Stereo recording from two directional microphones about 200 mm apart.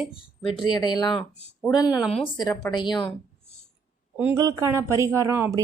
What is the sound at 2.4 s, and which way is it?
Speech, 20° left (ahead or behind).